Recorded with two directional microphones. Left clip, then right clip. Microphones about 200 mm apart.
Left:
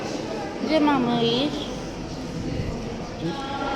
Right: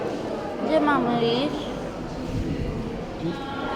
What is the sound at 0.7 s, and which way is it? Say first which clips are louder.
Speech: even; 30° left (ahead or behind).